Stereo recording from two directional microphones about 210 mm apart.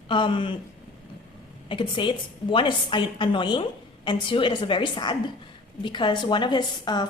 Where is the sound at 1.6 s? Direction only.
25° left (ahead or behind).